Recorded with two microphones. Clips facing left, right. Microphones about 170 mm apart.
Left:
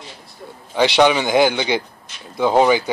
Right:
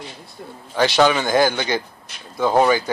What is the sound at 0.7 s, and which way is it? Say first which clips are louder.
A man's voice: left 2 dB; 15° left (ahead or behind).